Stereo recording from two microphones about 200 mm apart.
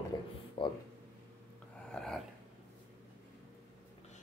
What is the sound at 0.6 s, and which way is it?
Speech, 25° left (ahead or behind).